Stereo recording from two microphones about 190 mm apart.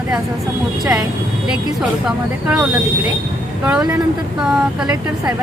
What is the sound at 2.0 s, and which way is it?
Speech, 5° right (ahead or behind).